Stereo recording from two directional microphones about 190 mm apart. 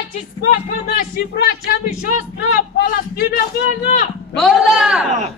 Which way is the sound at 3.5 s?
55° left (ahead or behind).